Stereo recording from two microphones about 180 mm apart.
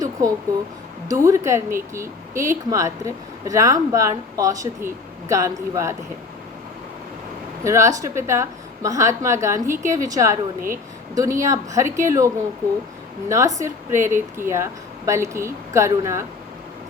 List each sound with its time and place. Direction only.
0.0 s a sound: 20° right (ahead or behind)
1.1 s speech: 15° right (ahead or behind)
7.6 s speech: 15° right (ahead or behind)